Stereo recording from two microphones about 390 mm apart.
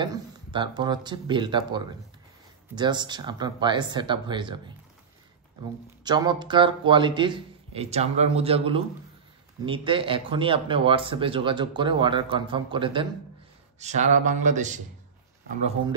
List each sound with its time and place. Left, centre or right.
0.0 s a man's voice: centre